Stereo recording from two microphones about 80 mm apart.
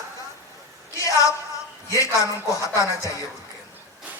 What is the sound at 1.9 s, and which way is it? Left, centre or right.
A man's voice, left.